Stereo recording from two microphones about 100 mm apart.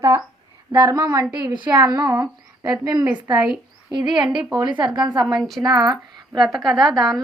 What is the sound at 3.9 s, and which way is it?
A woman's voice, 50° right (ahead or behind).